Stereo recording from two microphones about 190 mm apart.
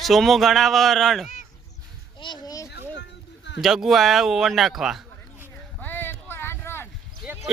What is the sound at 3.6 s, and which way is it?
Speech, centre (ahead or behind).